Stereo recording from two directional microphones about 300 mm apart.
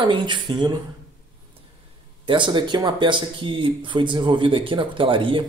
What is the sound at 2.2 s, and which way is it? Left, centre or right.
Speech, centre.